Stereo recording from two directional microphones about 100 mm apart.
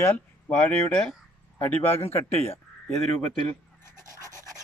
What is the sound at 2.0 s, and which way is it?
Speech, 20° left (ahead or behind).